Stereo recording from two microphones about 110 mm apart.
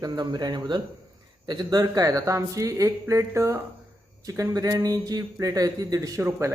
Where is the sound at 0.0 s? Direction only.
40° right (ahead or behind).